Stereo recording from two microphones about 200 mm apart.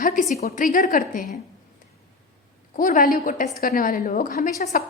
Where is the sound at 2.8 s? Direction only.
45° left (ahead or behind).